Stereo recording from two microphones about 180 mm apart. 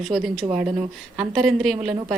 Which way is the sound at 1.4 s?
Centre (ahead or behind).